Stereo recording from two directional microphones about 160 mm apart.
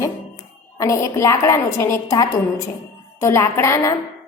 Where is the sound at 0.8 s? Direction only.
20° left (ahead or behind).